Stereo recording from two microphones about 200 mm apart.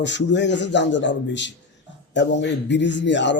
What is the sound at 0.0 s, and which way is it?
A man's voice, 60° left (ahead or behind).